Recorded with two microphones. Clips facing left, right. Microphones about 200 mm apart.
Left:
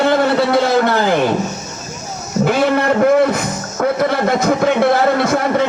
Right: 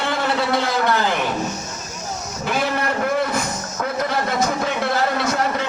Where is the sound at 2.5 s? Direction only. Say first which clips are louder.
Left 7 dB; 55° left (ahead or behind).